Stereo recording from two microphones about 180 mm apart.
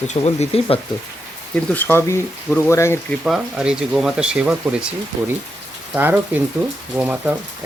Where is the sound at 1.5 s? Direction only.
10° left (ahead or behind).